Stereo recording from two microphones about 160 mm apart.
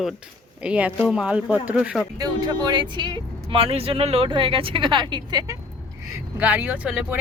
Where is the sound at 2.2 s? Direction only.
25° right (ahead or behind).